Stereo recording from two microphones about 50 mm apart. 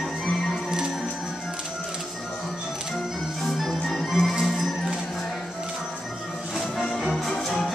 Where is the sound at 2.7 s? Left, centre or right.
Centre.